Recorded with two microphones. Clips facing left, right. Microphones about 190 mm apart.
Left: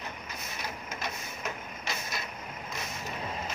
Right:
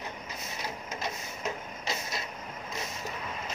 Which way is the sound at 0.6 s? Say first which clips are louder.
Right 2 dB; 25° right (ahead or behind).